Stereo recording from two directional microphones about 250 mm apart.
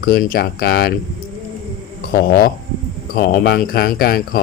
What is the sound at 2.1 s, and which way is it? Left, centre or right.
Speech, left.